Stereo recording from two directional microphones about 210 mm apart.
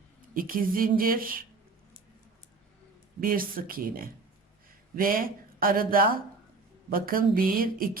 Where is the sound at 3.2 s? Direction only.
40° right (ahead or behind).